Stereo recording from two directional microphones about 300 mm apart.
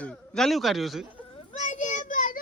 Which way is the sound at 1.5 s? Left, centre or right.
Left.